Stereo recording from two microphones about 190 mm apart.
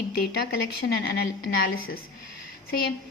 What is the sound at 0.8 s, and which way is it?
Speech, 55° left (ahead or behind).